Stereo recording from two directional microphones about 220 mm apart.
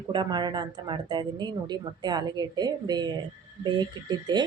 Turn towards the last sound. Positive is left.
turn(degrees=-20)  # may be behind; listen again after turning